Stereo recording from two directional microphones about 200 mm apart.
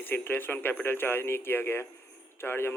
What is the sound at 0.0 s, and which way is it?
Speech, 10° left (ahead or behind).